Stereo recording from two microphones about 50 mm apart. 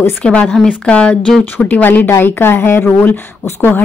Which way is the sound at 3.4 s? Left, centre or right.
Left.